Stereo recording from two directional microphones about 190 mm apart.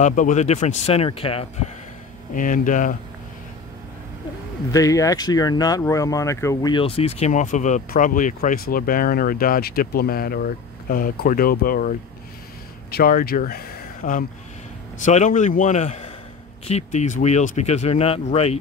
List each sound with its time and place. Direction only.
0.0 s speech: 40° left (ahead or behind)
2.3 s speech: 45° left (ahead or behind)
4.6 s speech: 20° left (ahead or behind); by 11.9 s 50° left (ahead or behind)
12.9 s speech: 50° left (ahead or behind); by 18.6 s 35° left (ahead or behind)